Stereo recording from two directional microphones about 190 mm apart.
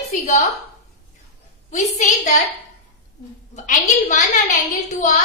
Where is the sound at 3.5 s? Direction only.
40° left (ahead or behind).